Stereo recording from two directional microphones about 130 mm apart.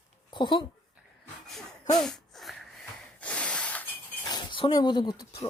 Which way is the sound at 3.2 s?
10° left (ahead or behind).